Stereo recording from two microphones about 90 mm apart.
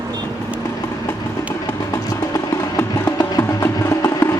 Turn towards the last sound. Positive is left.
turn(degrees=30)  # may be behind; listen again after turning